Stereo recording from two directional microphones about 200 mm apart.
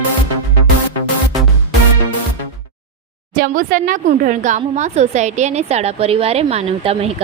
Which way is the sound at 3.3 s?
45° right (ahead or behind).